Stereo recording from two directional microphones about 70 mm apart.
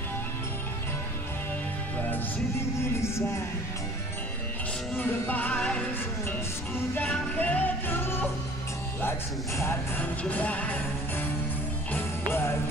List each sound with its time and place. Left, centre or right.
2.8 s music: left
4.9 s music: left
5.5 s music: centre
7.0 s music: left
10.2 s music: centre